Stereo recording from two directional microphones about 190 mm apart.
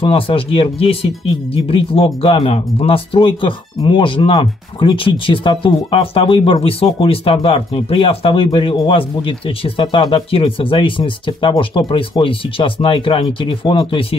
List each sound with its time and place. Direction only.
0.0 s speech: 30° left (ahead or behind)